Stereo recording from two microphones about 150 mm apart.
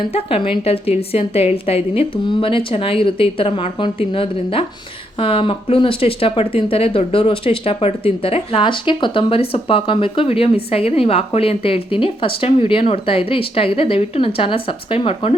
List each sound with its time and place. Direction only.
0.0 s speech: 40° left (ahead or behind)